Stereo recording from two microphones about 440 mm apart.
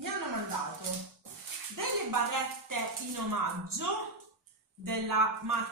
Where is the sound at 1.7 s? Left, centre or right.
Right.